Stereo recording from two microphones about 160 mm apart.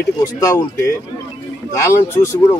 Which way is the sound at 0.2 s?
20° left (ahead or behind).